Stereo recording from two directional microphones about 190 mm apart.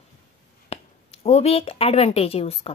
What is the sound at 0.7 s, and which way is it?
A woman's voice, 35° left (ahead or behind).